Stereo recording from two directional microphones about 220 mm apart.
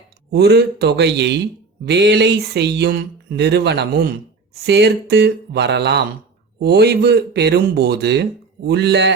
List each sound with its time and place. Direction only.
0.3 s speech: 50° right (ahead or behind)